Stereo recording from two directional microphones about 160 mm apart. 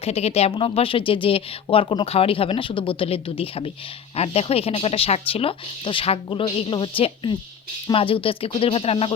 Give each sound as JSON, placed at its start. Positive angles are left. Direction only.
{"t": 0.0, "sound": "speech", "side_deg": 40}